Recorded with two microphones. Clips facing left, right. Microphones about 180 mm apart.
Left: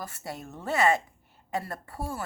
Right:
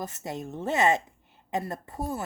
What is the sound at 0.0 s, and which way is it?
Speech, 20° right (ahead or behind).